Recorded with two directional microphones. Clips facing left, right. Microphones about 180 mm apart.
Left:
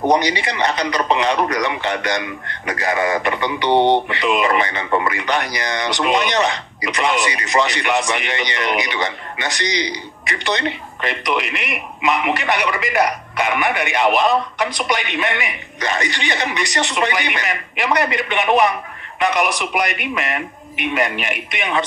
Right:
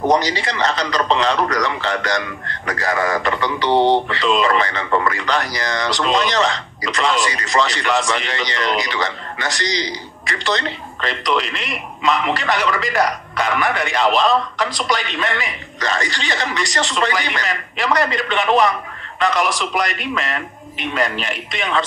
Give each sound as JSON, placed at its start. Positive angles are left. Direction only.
{"t": 0.1, "sound": "speech", "side_deg": 15}
{"t": 3.7, "sound": "a sound", "side_deg": -5}
{"t": 4.1, "sound": "speech", "side_deg": 15}